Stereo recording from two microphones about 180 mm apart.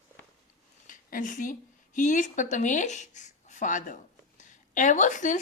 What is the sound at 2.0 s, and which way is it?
A woman's voice, 45° left (ahead or behind).